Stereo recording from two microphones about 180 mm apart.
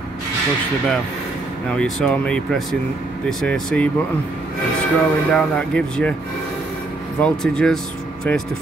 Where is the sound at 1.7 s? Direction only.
5° left (ahead or behind).